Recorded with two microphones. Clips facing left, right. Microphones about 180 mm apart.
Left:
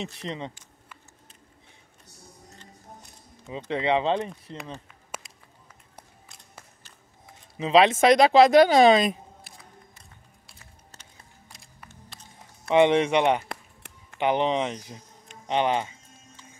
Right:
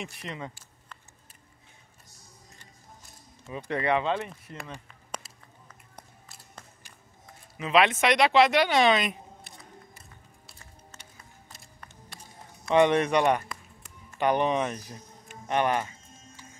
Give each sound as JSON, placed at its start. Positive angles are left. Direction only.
{"t": 0.0, "sound": "speech", "side_deg": 30}
{"t": 3.7, "sound": "speech", "side_deg": 25}
{"t": 5.1, "sound": "a sound", "side_deg": 5}
{"t": 7.5, "sound": "speech", "side_deg": 30}
{"t": 9.4, "sound": "music", "side_deg": 0}
{"t": 12.7, "sound": "speech", "side_deg": 20}
{"t": 13.5, "sound": "music", "side_deg": 65}
{"t": 14.2, "sound": "speech", "side_deg": 20}